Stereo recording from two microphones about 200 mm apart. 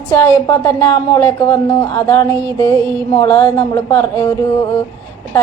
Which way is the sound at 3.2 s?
10° left (ahead or behind).